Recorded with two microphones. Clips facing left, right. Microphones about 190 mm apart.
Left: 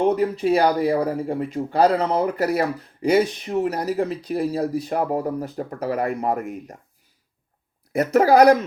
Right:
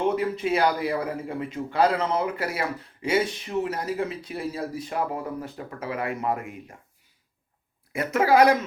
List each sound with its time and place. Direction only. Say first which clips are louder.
0.0 s speech: left 5 dB; 35° left (ahead or behind)
7.9 s speech: left 5 dB; 40° left (ahead or behind)